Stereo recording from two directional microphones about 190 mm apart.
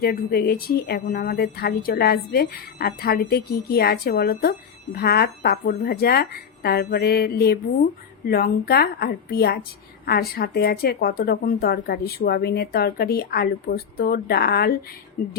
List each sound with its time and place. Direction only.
0.0 s speech: 55° left (ahead or behind)